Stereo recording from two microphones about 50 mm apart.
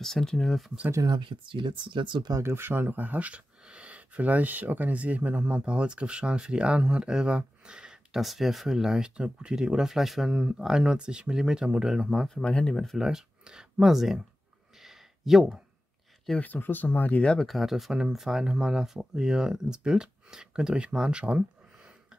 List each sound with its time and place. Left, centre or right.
0.0 s speech: centre
2.5 s speech: right; by 8.2 s centre
8.2 s speech: centre
10.3 s speech: right
12.4 s speech: centre
12.8 s speech: centre
14.8 s a sound: centre
16.3 s speech: left
17.2 s speech: centre
17.5 s speech: centre; by 21.9 s right